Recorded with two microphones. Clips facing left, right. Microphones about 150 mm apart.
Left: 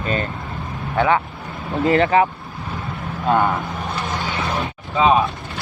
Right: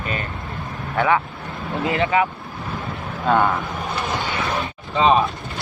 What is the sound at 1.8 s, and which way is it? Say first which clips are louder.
Speech: left 4 dB; 40° left (ahead or behind).